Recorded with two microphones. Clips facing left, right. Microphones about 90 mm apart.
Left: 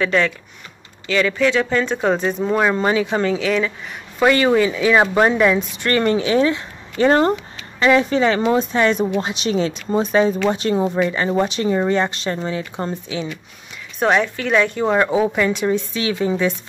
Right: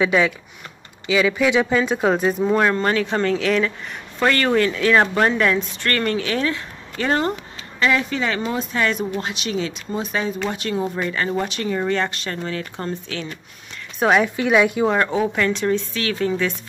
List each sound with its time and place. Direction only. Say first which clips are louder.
0.0 s speech: even; 10° right (ahead or behind); by 7.1 s 20° left (ahead or behind)
7.1 s speech: left 5 dB; 35° left (ahead or behind)
11.0 s speech: left 5 dB; 20° left (ahead or behind)
13.9 s a woman's voice: even; centre (ahead or behind)
14.9 s speech: left 3 dB; 10° left (ahead or behind)